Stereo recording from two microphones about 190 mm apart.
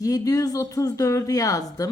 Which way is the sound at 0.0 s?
20° left (ahead or behind).